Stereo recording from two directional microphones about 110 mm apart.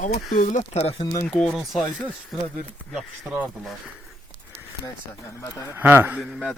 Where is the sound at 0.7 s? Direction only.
65° left (ahead or behind).